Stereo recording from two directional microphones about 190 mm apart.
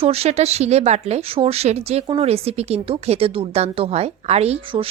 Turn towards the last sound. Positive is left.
turn(degrees=-30)  # may be behind; listen again after turning